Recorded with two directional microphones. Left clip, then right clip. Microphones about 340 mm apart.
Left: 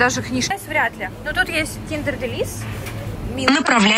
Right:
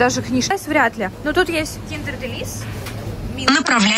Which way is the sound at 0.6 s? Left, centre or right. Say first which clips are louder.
Right 4 dB; right.